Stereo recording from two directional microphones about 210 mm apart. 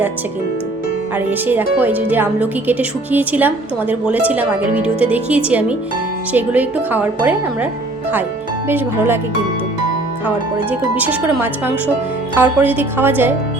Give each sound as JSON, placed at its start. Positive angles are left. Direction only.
{"t": 1.1, "sound": "speech", "side_deg": -10}
{"t": 10.2, "sound": "speech", "side_deg": -5}